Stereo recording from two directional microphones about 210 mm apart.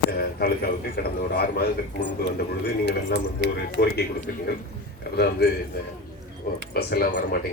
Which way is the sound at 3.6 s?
50° left (ahead or behind).